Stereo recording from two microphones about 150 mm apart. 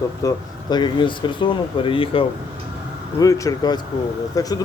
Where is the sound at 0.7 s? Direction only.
30° left (ahead or behind).